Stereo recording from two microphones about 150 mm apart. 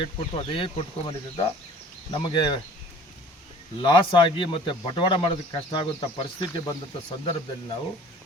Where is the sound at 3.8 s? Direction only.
30° left (ahead or behind).